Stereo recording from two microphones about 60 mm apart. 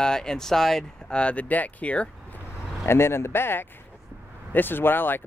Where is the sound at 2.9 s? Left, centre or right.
Left.